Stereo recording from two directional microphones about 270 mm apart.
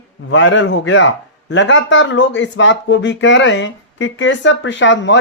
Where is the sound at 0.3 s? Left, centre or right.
Left.